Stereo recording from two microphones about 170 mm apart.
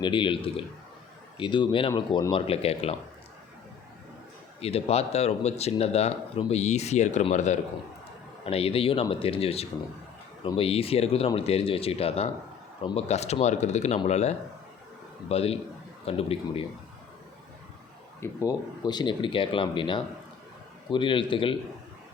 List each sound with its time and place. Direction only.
0.0 s speech: 30° left (ahead or behind)
4.6 s speech: 35° left (ahead or behind)
18.2 s speech: 20° left (ahead or behind)